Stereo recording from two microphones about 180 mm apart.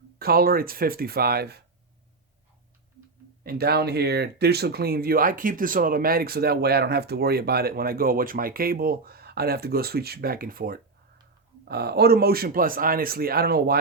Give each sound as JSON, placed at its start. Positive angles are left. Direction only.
{"t": 0.2, "sound": "speech", "side_deg": -55}
{"t": 3.4, "sound": "speech", "side_deg": -60}